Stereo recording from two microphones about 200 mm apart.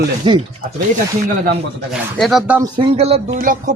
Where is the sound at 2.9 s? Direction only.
30° right (ahead or behind).